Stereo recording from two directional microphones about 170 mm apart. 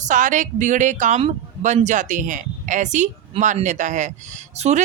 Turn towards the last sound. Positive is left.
turn(degrees=-40)  # may be behind; listen again after turning